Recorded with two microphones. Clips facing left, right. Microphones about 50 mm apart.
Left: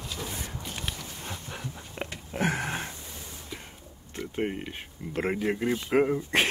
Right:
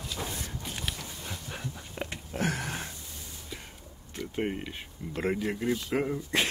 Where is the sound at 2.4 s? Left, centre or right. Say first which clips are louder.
Left 3 dB; left.